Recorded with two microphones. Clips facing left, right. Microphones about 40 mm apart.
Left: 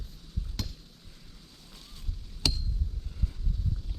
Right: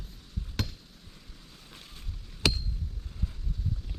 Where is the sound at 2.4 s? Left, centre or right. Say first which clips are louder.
Right 3 dB; right.